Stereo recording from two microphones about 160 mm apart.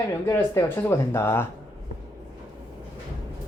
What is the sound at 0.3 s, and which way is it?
Speech, 15° left (ahead or behind).